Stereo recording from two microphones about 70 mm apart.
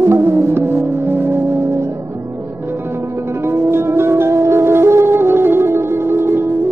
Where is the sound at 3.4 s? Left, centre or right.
Right.